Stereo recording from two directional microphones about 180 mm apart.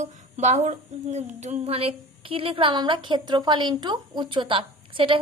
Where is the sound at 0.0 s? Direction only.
40° right (ahead or behind).